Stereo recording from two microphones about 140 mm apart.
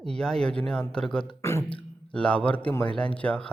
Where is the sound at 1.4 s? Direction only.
20° left (ahead or behind).